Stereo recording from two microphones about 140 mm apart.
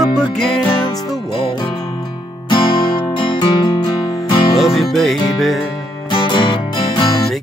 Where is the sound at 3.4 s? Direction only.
30° left (ahead or behind).